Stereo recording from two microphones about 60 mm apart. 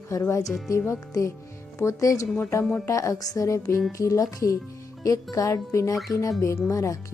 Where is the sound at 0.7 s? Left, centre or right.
Left.